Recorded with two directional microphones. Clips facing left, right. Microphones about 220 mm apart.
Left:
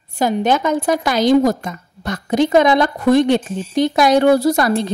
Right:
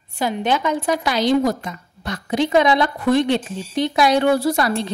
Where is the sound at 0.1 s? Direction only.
45° left (ahead or behind).